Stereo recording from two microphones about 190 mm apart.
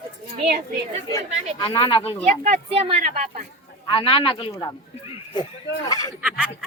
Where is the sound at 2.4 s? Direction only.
30° right (ahead or behind).